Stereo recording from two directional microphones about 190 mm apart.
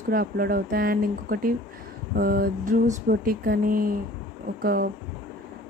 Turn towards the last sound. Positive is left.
turn(degrees=-50)  # may be behind; listen again after turning